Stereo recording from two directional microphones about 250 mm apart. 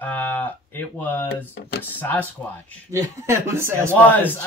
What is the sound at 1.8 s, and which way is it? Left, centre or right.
Speech, centre.